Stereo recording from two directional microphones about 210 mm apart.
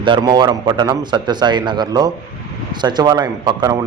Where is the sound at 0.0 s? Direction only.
20° right (ahead or behind).